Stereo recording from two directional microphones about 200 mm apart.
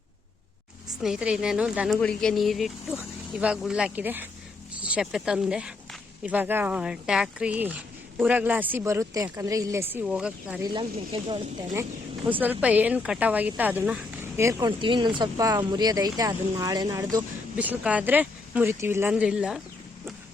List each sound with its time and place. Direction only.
1.0 s speech: 5° right (ahead or behind)
10.6 s speech: 20° right (ahead or behind); by 19.6 s 5° right (ahead or behind)